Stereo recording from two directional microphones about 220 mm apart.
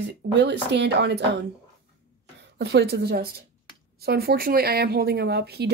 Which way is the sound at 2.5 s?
50° right (ahead or behind).